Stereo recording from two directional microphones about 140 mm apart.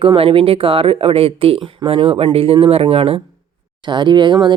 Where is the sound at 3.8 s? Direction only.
30° right (ahead or behind).